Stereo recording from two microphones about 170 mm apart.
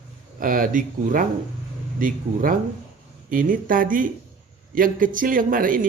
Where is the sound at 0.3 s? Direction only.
55° right (ahead or behind).